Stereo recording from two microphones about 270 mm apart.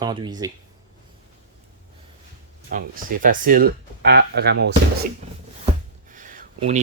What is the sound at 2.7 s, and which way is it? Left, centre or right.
Speech, right.